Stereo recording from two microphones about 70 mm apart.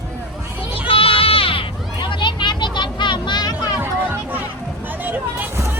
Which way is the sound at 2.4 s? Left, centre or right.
Left.